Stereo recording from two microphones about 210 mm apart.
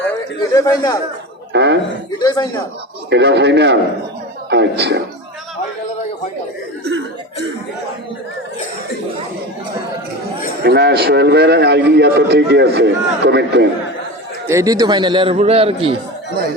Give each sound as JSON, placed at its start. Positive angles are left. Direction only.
{"t": 0.5, "sound": "speech", "side_deg": 15}
{"t": 1.5, "sound": "speech", "side_deg": -55}
{"t": 2.1, "sound": "speech", "side_deg": 20}
{"t": 3.1, "sound": "speech", "side_deg": -55}
{"t": 10.6, "sound": "a man's voice", "side_deg": -55}
{"t": 14.4, "sound": "a man's voice", "side_deg": -15}